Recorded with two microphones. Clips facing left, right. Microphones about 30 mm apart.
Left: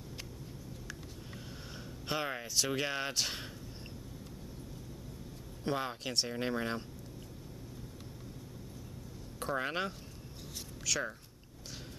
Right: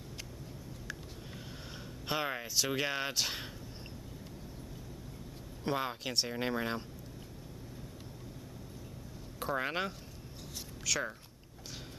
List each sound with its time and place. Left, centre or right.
2.0 s speech: centre
5.6 s speech: centre
9.4 s speech: centre